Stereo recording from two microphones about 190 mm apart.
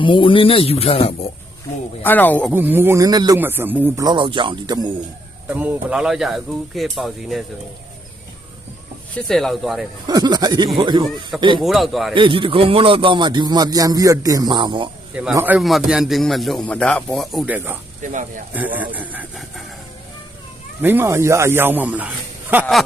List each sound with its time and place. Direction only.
0.0 s a man's voice: 25° left (ahead or behind)
2.0 s speech: 10° left (ahead or behind)
2.5 s speech: 10° right (ahead or behind)
4.0 s a man's voice: 25° right (ahead or behind)
5.5 s a man's voice: 10° right (ahead or behind)
9.1 s a man's voice: centre (ahead or behind)
10.1 s a man's voice: 20° right (ahead or behind)
11.6 s a man's voice: centre (ahead or behind)
12.1 s a man's voice: 25° right (ahead or behind)
15.1 s a man's voice: 5° right (ahead or behind)
18.0 s speech: 40° right (ahead or behind)
18.5 s speech: 10° right (ahead or behind)
20.8 s speech: 10° right (ahead or behind)